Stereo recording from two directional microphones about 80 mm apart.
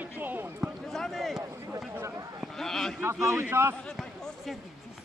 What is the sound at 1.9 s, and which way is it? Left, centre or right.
Speech, right.